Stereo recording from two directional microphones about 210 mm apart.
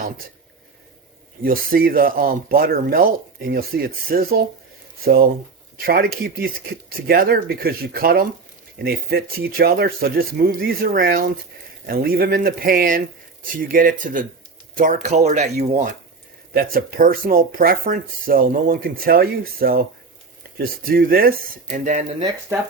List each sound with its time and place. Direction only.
1.4 s speech: 45° right (ahead or behind)